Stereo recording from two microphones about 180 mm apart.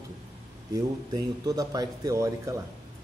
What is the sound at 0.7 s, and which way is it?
A man's voice, 20° right (ahead or behind).